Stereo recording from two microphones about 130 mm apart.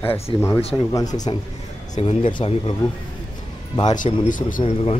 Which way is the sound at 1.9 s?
45° left (ahead or behind).